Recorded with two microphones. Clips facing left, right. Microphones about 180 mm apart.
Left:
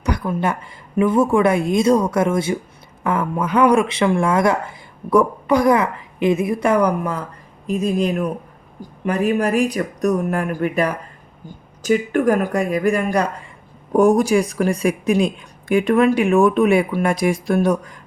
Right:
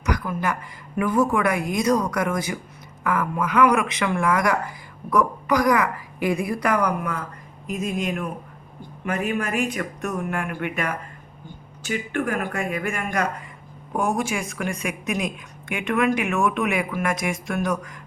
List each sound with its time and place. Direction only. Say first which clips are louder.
0.0 s speech: left 4 dB; 30° left (ahead or behind)